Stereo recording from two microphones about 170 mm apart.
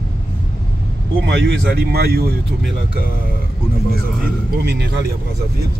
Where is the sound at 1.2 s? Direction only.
80° right.